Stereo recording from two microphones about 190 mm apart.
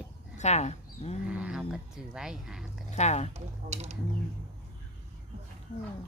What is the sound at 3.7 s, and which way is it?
Mechanisms, 35° right (ahead or behind).